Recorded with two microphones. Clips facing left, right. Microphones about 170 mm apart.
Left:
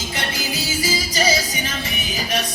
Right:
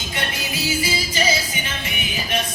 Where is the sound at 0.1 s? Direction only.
35° left (ahead or behind).